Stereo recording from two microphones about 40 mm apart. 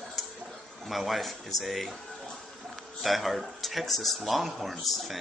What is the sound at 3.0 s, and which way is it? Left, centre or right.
Speech, centre.